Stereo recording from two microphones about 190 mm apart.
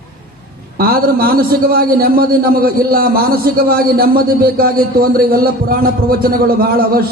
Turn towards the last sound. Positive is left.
turn(degrees=-50)  # may be behind; listen again after turning